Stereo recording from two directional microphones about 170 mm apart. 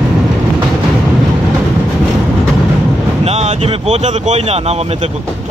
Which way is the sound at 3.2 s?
40° right (ahead or behind).